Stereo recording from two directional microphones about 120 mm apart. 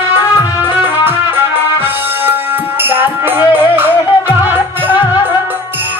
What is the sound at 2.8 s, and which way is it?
Music, 20° right (ahead or behind).